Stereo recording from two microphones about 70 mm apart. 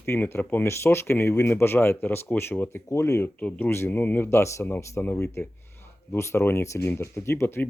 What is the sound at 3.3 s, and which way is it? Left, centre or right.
Speech, centre.